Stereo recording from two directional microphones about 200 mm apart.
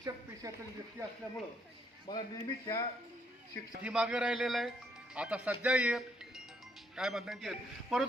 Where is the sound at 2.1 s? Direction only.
20° left (ahead or behind).